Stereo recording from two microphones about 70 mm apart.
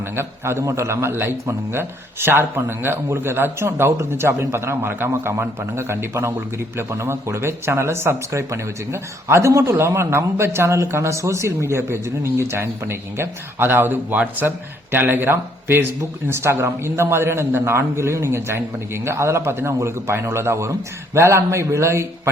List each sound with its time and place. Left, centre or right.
0.0 s speech: right